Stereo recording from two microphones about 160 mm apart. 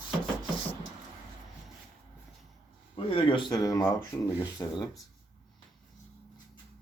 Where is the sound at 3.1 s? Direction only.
35° left (ahead or behind).